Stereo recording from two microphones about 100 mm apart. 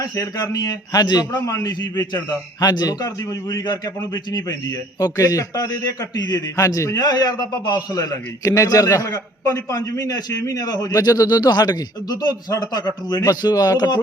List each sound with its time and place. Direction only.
0.0 s a man's voice: 40° left (ahead or behind)